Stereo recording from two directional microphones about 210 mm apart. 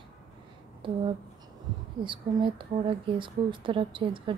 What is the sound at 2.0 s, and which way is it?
A woman's voice, 25° right (ahead or behind).